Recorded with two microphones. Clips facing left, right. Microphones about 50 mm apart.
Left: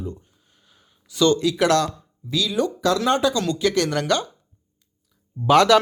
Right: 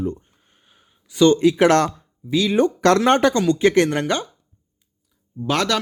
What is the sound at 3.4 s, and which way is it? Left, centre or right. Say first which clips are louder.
Speech: right 5 dB; right.